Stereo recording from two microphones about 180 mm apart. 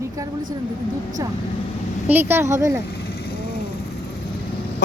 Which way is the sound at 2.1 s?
10° right (ahead or behind).